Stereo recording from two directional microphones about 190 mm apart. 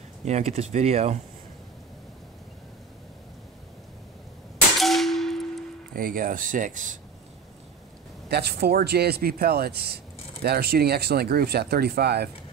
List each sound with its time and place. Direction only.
0.2 s speech: 35° right (ahead or behind)
4.7 s a sound: centre (ahead or behind)
5.9 s speech: 50° right (ahead or behind)
8.3 s speech: 60° right (ahead or behind)